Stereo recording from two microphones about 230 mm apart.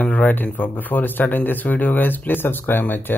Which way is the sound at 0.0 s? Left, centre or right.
Centre.